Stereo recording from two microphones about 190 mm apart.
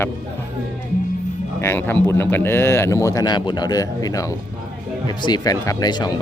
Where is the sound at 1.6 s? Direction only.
10° left (ahead or behind).